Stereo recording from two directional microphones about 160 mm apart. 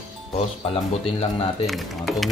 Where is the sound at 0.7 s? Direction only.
40° left (ahead or behind).